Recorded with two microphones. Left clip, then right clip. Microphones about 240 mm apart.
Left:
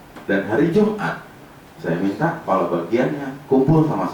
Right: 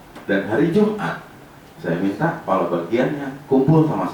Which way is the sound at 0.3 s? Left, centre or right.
Centre.